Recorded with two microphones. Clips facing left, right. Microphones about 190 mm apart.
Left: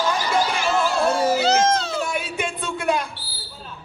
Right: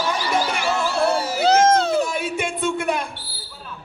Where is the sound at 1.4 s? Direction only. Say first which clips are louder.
Right 4 dB; 55° right (ahead or behind).